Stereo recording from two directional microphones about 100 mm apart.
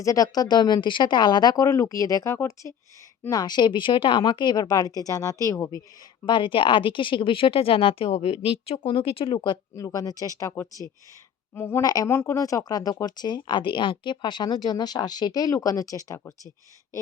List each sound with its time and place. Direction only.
0.0 s speech: 35° left (ahead or behind)
3.2 s speech: 45° left (ahead or behind)
6.2 s speech: 55° left (ahead or behind)
9.7 s a woman's voice: 35° left (ahead or behind)
11.8 s speech: 40° left (ahead or behind)
12.0 s speech: 25° left (ahead or behind)